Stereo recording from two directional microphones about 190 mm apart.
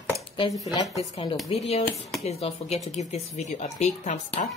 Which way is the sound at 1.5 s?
30° left (ahead or behind).